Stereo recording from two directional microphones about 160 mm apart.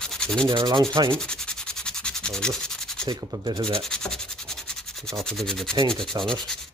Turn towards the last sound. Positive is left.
turn(degrees=5)  # may be behind; listen again after turning